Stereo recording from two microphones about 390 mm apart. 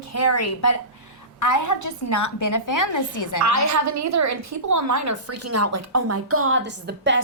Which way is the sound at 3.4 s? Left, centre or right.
Right.